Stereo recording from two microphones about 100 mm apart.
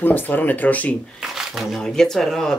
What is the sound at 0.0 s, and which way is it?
Speech, 20° left (ahead or behind).